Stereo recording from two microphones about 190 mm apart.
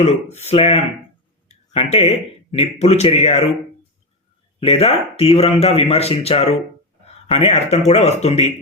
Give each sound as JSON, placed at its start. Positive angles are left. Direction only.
{"t": 0.0, "sound": "speech", "side_deg": 35}
{"t": 4.6, "sound": "speech", "side_deg": 30}